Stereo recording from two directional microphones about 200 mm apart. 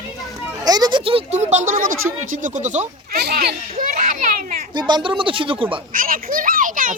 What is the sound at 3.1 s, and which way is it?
A child's voice, 50° right (ahead or behind).